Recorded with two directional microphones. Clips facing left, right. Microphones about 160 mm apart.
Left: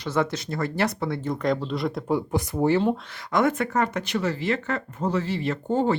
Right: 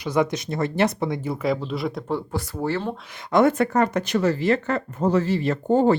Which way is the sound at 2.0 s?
15° left (ahead or behind).